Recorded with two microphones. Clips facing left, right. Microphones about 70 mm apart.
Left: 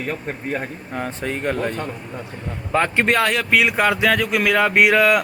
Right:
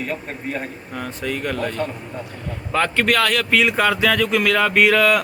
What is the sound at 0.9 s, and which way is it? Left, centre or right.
Speech, left.